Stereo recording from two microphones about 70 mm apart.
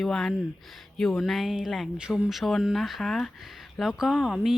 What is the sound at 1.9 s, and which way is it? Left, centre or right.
Speech, centre.